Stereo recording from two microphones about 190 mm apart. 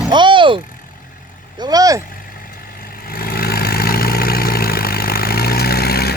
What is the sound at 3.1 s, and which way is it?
Vehicle, 50° left (ahead or behind).